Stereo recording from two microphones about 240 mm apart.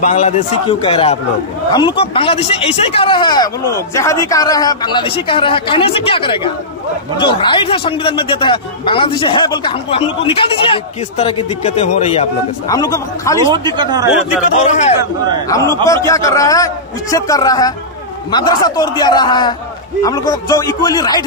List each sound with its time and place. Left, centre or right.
0.0 s speech: left
12.6 s a man's voice: centre
13.5 s speech: centre
15.4 s a man's voice: centre